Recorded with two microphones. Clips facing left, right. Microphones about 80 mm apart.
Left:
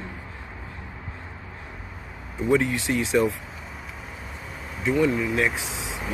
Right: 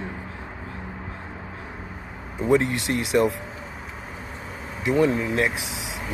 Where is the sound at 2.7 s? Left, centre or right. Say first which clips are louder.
Even; right.